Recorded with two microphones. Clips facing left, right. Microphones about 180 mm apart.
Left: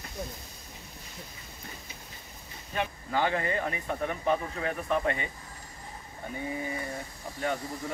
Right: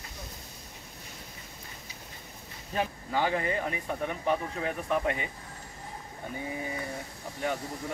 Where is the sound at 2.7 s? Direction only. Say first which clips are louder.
Right 1 dB; 35° right (ahead or behind).